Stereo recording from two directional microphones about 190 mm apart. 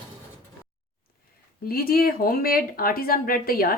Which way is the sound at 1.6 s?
50° left (ahead or behind).